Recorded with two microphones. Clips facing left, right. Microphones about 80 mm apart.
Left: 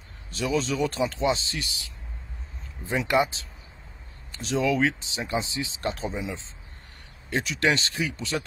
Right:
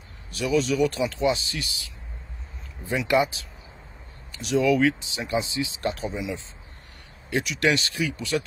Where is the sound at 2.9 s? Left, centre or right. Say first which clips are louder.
Right 1 dB; left.